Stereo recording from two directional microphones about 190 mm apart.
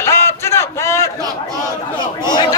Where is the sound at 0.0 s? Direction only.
15° left (ahead or behind).